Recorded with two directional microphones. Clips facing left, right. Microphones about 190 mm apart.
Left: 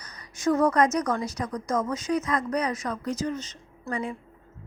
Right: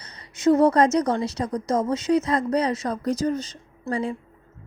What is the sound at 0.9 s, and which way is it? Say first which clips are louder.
Speech: right 5 dB; 30° right (ahead or behind).